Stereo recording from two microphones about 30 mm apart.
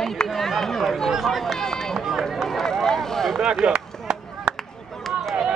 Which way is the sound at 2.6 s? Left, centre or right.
Centre.